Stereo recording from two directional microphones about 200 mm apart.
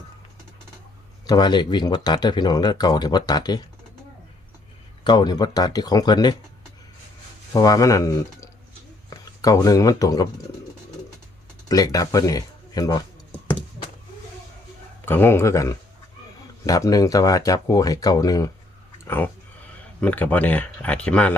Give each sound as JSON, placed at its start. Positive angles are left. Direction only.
{"t": 1.3, "sound": "speech", "side_deg": 20}
{"t": 5.0, "sound": "speech", "side_deg": 20}
{"t": 7.5, "sound": "speech", "side_deg": 20}
{"t": 11.7, "sound": "speech", "side_deg": 20}
{"t": 15.0, "sound": "speech", "side_deg": 10}